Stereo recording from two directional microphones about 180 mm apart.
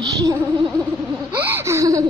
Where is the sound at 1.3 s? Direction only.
10° right (ahead or behind).